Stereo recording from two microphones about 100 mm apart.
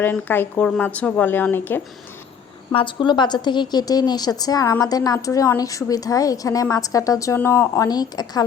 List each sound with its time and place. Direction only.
0.0 s a woman's voice: 20° left (ahead or behind)
2.7 s a woman's voice: 55° left (ahead or behind); by 7.9 s 25° left (ahead or behind)
7.9 s a woman's voice: 40° left (ahead or behind)